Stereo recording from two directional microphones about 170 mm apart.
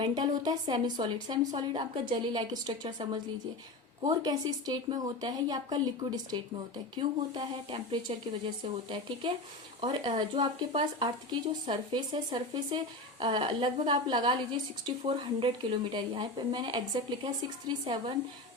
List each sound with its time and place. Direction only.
0.0 s speech: 25° right (ahead or behind)
15.9 s speech: 25° right (ahead or behind)